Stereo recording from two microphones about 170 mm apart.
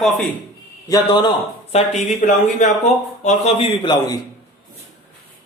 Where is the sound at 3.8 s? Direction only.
25° left (ahead or behind).